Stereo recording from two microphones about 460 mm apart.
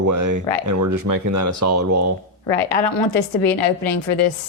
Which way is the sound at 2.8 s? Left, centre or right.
Left.